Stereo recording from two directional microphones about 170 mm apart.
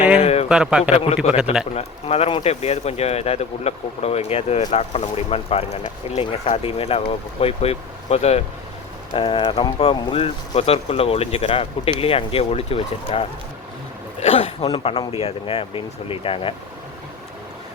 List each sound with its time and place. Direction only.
0.2 s a sound: 35° left (ahead or behind)
0.4 s a man's voice: 5° right (ahead or behind)
1.0 s speech: 40° left (ahead or behind)